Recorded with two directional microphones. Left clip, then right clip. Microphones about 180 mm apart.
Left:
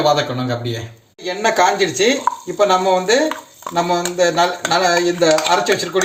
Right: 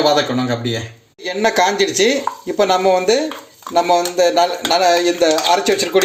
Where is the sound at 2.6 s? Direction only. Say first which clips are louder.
Right 1 dB; 35° right (ahead or behind).